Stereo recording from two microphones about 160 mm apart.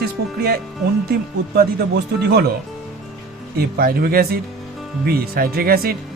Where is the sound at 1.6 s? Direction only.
85° right.